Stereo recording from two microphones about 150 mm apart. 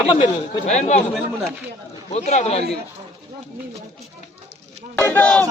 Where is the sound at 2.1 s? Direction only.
50° left (ahead or behind).